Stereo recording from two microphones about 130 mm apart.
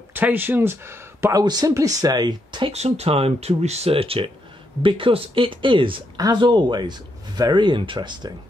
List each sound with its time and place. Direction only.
0.1 s speech: 15° right (ahead or behind)
1.4 s speech: 30° right (ahead or behind)
2.7 s speech: 55° right (ahead or behind); by 8.4 s 35° right (ahead or behind)